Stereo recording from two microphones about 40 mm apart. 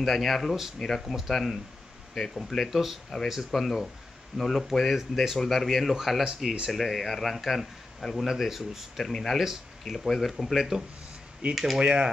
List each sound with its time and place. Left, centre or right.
0.0 s speech: centre
0.7 s speech: centre
1.0 s speech: centre
1.3 s speech: centre
5.4 s speech: centre
9.0 s speech: centre
10.3 s speech: centre
11.8 s speech: right